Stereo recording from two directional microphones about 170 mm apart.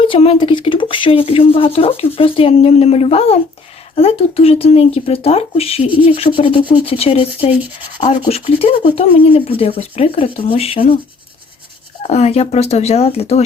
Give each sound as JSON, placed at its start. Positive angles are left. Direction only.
{"t": 0.0, "sound": "speech", "side_deg": 35}
{"t": 12.0, "sound": "speech", "side_deg": 40}